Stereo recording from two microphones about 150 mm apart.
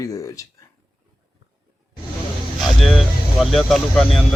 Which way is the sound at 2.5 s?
Centre (ahead or behind).